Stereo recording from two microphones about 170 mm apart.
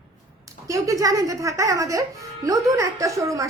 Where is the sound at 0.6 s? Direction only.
20° right (ahead or behind).